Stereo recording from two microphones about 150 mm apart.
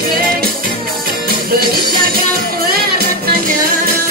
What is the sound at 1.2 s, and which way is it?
Music, 90° right.